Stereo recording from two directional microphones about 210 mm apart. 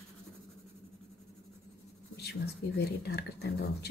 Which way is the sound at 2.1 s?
50° left (ahead or behind).